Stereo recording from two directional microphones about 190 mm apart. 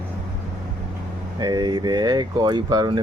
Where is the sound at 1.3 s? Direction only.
20° right (ahead or behind).